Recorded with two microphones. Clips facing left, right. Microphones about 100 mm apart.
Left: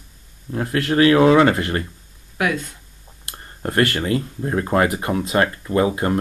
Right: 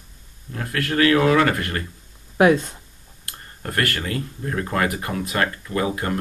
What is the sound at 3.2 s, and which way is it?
Speech, 25° left (ahead or behind).